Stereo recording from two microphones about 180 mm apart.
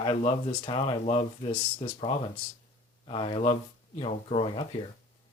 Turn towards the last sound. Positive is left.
turn(degrees=30)  # may be behind; listen again after turning